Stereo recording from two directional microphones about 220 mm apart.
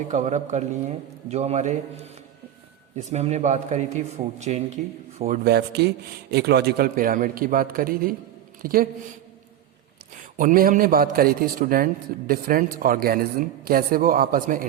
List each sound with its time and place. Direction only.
0.1 s speech: 35° right (ahead or behind)
5.5 s speech: 45° right (ahead or behind)
10.3 s speech: 40° right (ahead or behind)